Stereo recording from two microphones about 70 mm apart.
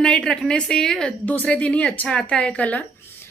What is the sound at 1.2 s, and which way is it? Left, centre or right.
A woman's voice, left.